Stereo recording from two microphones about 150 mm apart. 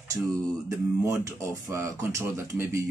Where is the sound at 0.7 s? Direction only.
20° right (ahead or behind).